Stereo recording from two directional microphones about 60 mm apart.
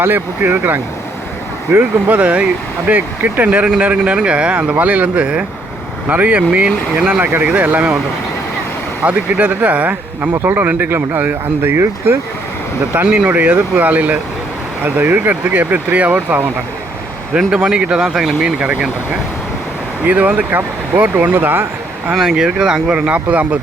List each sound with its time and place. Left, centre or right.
0.0 s speech: right
9.0 s speech: right
10.4 s speech: right
12.9 s speech: right
17.3 s speech: centre
20.1 s speech: right
22.1 s speech: centre; by 23.6 s right